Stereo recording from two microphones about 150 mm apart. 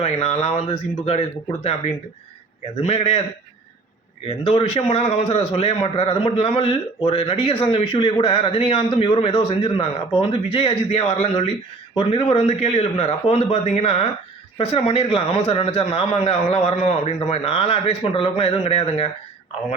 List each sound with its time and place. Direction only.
0.0 s a man's voice: 45° left (ahead or behind)
2.8 s a man's voice: 45° left (ahead or behind)
4.3 s a man's voice: 40° left (ahead or behind)